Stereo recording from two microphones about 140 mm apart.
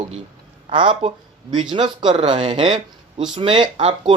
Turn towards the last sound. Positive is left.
turn(degrees=-35)  # may be behind; listen again after turning